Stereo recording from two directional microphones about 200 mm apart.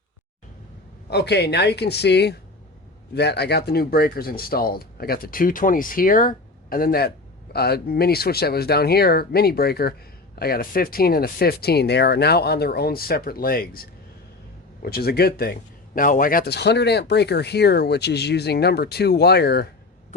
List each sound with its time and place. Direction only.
1.1 s speech: 55° left (ahead or behind)